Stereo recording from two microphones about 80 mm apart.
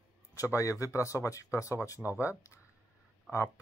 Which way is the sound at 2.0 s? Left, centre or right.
Right.